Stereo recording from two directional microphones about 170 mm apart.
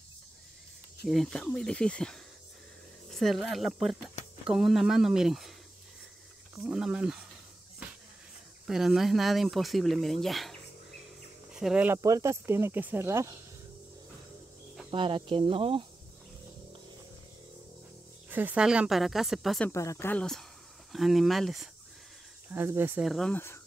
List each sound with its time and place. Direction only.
1.0 s speech: centre (ahead or behind)
6.5 s speech: 5° right (ahead or behind)
8.6 s speech: centre (ahead or behind)
12.0 s speech: 20° right (ahead or behind)
14.9 s speech: 30° right (ahead or behind)
18.3 s speech: 10° right (ahead or behind)
19.7 s speech: 15° left (ahead or behind); by 21.6 s centre (ahead or behind)
22.5 s speech: 15° right (ahead or behind)
23.0 s speech: centre (ahead or behind)
23.3 s speech: 15° left (ahead or behind)